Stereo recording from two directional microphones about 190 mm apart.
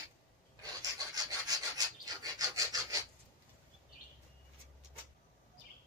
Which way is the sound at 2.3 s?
20° right (ahead or behind).